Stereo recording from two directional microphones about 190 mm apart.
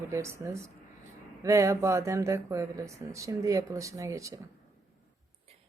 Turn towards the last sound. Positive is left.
turn(degrees=-15)  # may be behind; listen again after turning